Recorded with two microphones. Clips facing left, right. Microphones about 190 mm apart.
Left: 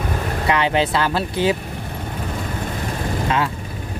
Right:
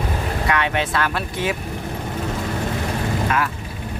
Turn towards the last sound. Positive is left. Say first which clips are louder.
# left 1 dB
turn(degrees=25)  # may be behind; listen again after turning